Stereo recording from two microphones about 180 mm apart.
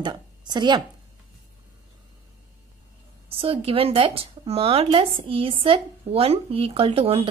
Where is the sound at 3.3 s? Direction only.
30° right (ahead or behind).